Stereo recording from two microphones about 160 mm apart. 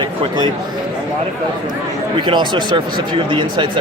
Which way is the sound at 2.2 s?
30° right (ahead or behind).